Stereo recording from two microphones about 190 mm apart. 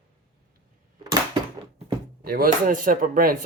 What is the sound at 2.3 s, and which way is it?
Speech, 50° right (ahead or behind).